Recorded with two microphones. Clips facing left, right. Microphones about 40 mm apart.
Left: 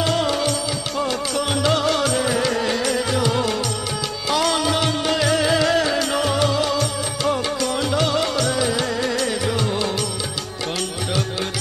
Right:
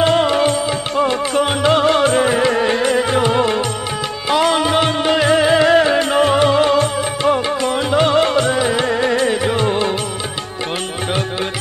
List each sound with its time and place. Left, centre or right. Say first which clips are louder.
0.0 s music: right 7 dB; right